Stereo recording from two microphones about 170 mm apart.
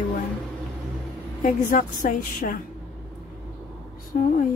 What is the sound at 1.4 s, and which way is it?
A woman's voice, 50° left (ahead or behind).